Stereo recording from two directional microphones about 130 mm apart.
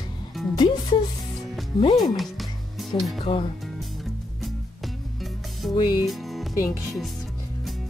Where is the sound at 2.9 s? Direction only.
45° left (ahead or behind).